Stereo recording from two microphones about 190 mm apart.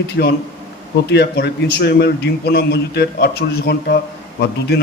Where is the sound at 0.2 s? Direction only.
55° left (ahead or behind).